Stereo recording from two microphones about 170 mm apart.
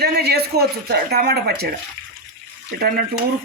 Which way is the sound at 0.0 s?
70° right (ahead or behind).